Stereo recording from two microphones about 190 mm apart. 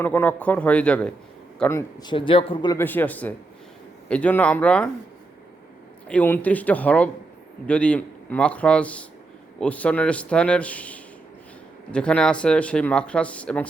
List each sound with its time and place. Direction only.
0.0 s a man's voice: 10° left (ahead or behind)
2.0 s speech: 25° left (ahead or behind)
2.7 s a man's voice: 10° left (ahead or behind)
6.1 s a man's voice: 10° left (ahead or behind)